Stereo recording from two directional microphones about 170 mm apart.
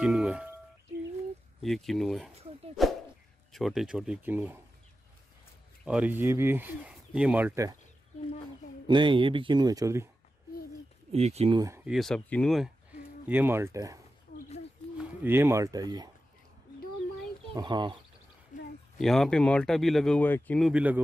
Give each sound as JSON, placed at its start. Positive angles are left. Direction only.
{"t": 0.0, "sound": "music", "side_deg": -5}
{"t": 1.6, "sound": "speech", "side_deg": 0}
{"t": 2.8, "sound": "a sound", "side_deg": 0}
{"t": 3.5, "sound": "speech", "side_deg": 0}
{"t": 5.9, "sound": "speech", "side_deg": -10}
{"t": 8.8, "sound": "speech", "side_deg": -30}
{"t": 11.1, "sound": "speech", "side_deg": -40}
{"t": 11.5, "sound": "speech", "side_deg": -20}
{"t": 11.8, "sound": "speech", "side_deg": 0}
{"t": 13.3, "sound": "speech", "side_deg": -10}
{"t": 15.0, "sound": "speech", "side_deg": -15}
{"t": 17.5, "sound": "speech", "side_deg": -25}
{"t": 18.5, "sound": "a sound", "side_deg": 45}
{"t": 18.9, "sound": "speech", "side_deg": 0}